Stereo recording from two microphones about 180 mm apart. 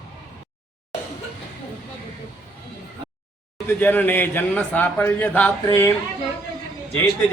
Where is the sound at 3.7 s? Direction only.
10° left (ahead or behind).